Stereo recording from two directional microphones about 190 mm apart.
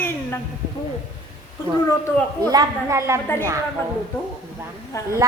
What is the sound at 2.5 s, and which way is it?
Speech, 20° right (ahead or behind).